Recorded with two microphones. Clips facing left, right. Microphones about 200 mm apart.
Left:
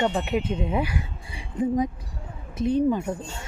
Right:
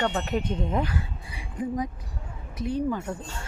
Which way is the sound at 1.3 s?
25° left (ahead or behind).